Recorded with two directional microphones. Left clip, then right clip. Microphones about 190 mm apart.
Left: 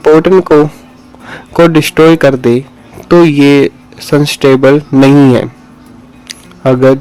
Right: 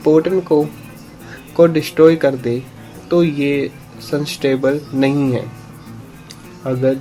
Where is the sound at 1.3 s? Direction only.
35° left (ahead or behind).